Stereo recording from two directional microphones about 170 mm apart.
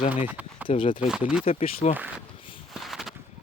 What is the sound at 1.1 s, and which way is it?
Speech, 5° right (ahead or behind).